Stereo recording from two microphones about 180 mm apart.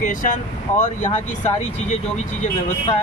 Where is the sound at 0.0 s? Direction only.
45° left (ahead or behind).